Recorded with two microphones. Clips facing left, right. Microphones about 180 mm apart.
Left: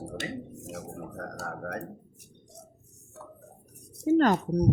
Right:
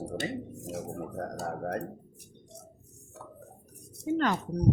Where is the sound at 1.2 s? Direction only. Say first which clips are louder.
Right 3 dB; 30° right (ahead or behind).